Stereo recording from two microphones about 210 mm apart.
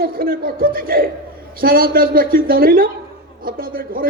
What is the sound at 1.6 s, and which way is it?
A woman's voice, 45° right (ahead or behind).